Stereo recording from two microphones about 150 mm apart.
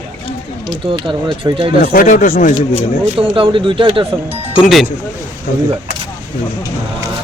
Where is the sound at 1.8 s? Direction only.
65° left (ahead or behind).